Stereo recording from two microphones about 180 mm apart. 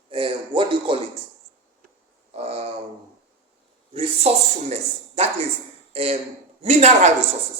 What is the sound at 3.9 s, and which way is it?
Speech, 35° right (ahead or behind).